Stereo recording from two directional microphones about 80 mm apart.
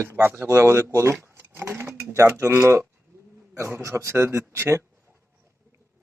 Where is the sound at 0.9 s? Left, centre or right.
Right.